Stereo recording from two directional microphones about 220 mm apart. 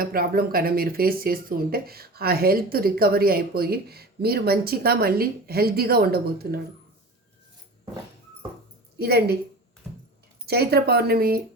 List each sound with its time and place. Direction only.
0.0 s speech: 40° right (ahead or behind)
9.0 s a woman's voice: 45° right (ahead or behind)
10.4 s speech: 45° right (ahead or behind)